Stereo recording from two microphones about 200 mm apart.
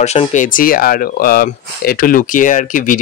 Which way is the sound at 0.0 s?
35° left (ahead or behind).